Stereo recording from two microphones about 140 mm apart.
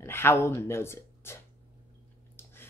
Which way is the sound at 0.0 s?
15° left (ahead or behind).